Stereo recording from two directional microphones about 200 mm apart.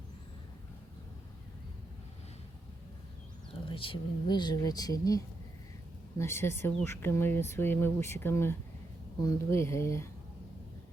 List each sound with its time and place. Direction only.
3.7 s speech: 25° left (ahead or behind)